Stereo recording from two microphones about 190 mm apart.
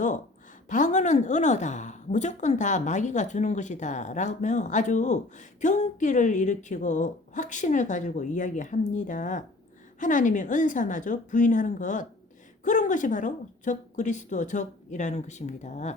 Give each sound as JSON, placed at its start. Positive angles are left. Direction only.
{"t": 0.7, "sound": "a woman's voice", "side_deg": 40}